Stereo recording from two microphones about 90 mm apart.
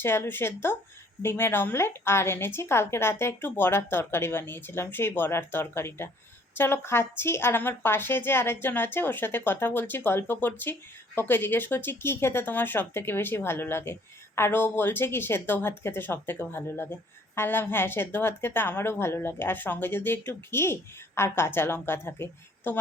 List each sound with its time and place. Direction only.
0.0 s speech: 25° left (ahead or behind)